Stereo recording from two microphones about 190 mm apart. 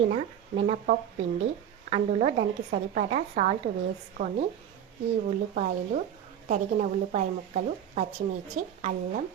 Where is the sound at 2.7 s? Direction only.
45° right (ahead or behind).